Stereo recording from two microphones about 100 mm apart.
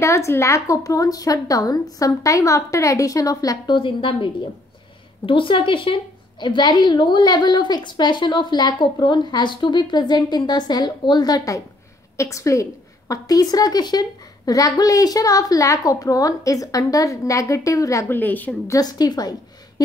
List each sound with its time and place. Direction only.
0.0 s a woman's voice: 30° left (ahead or behind)
3.7 s a woman's voice: 55° left (ahead or behind); by 18.1 s 35° left (ahead or behind)
18.1 s a woman's voice: 15° left (ahead or behind)
18.7 s a woman's voice: 40° left (ahead or behind)